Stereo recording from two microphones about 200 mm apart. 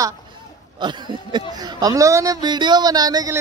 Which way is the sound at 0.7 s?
20° right (ahead or behind).